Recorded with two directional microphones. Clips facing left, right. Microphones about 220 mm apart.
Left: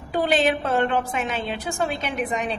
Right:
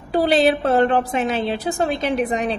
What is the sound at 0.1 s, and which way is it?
A woman's voice, 35° right (ahead or behind).